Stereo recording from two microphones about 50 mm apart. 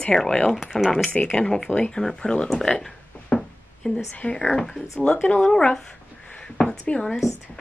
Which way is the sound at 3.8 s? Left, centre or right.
Left.